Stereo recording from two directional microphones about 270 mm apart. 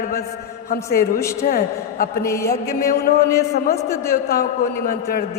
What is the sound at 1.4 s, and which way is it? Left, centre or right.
Speech, left.